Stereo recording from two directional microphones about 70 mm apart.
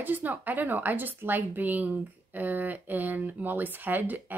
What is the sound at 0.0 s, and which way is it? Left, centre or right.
Speech, right.